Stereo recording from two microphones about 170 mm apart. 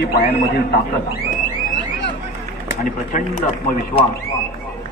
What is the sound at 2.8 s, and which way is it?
Speech, 50° left (ahead or behind).